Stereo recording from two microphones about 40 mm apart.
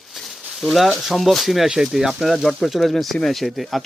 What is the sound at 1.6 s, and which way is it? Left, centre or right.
Speech, centre.